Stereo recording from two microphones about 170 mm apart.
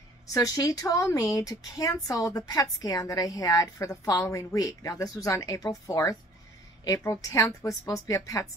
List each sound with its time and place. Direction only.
0.3 s speech: 20° left (ahead or behind)